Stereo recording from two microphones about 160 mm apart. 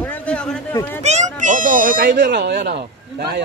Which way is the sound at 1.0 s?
45° right (ahead or behind).